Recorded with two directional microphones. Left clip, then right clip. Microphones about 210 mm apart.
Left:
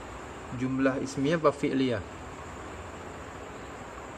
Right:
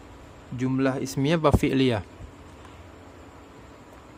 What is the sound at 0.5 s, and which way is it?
Speech, 55° right (ahead or behind).